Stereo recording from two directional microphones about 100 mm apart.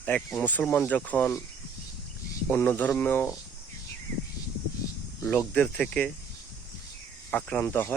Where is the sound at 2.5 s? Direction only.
20° left (ahead or behind).